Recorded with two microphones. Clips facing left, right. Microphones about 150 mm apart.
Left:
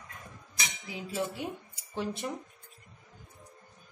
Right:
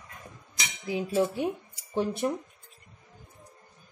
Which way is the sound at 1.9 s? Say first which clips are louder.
Right 7 dB; 55° right (ahead or behind).